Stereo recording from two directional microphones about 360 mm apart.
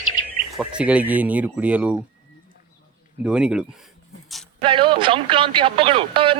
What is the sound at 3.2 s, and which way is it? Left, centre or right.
Speech, centre.